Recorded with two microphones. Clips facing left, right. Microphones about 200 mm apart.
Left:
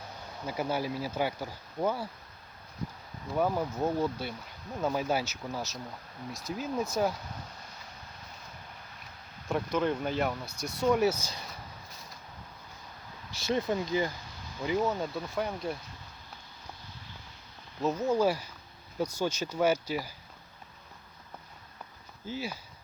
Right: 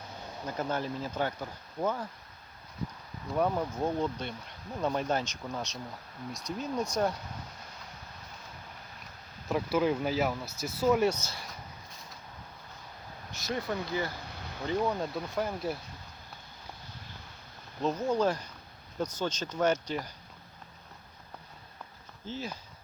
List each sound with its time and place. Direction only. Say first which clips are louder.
0.4 s speech: left 1 dB; 10° left (ahead or behind)
3.3 s speech: even; 5° left (ahead or behind)
9.5 s speech: right 1 dB; 5° right (ahead or behind); by 11.4 s 15° left (ahead or behind)
13.3 s speech: left 4 dB; 25° left (ahead or behind)
14.7 s speech: left 1 dB; centre (ahead or behind)
17.8 s speech: left 1 dB; 5° left (ahead or behind)
22.3 s speech: left 2 dB; 10° left (ahead or behind)